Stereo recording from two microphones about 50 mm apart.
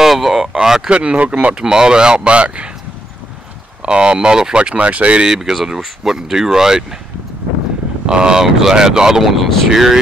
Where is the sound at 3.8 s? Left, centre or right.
Centre.